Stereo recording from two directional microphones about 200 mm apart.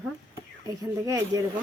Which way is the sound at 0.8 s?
15° right (ahead or behind).